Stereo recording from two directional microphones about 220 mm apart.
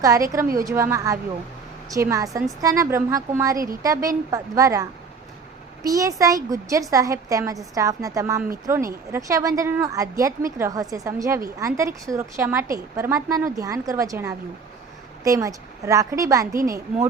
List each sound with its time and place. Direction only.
0.0 s a woman's voice: 15° right (ahead or behind)